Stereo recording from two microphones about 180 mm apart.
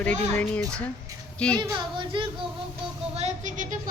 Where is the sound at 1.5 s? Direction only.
25° right (ahead or behind).